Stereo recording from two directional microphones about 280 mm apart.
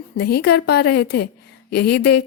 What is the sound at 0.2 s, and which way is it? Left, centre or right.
A woman's voice, left.